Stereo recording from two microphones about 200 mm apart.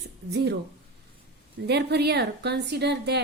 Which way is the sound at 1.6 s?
55° right (ahead or behind).